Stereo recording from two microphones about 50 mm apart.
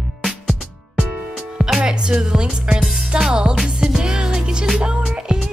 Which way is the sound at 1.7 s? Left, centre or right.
Centre.